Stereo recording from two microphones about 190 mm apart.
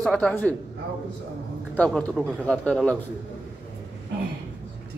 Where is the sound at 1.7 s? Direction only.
5° left (ahead or behind).